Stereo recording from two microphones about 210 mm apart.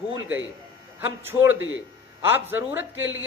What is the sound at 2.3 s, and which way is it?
Speech, 10° right (ahead or behind).